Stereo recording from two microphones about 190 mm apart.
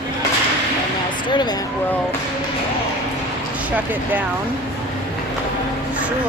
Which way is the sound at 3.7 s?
10° right (ahead or behind).